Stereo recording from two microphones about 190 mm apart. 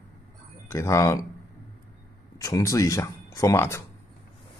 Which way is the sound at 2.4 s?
15° left (ahead or behind).